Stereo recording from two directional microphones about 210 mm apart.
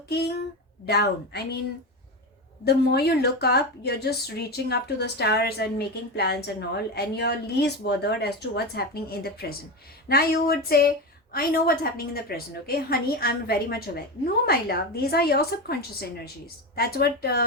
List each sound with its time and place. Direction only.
0.1 s a woman's voice: 50° left (ahead or behind)
2.6 s a woman's voice: 50° left (ahead or behind)